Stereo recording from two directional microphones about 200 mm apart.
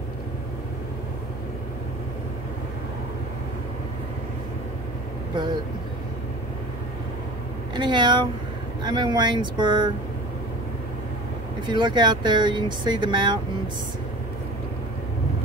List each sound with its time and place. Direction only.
5.3 s speech: 20° right (ahead or behind)
7.7 s speech: 25° right (ahead or behind)
11.6 s speech: 20° right (ahead or behind)